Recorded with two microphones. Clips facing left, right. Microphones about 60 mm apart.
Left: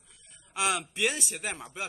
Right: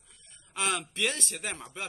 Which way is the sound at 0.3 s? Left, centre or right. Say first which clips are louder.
Left 2 dB; centre.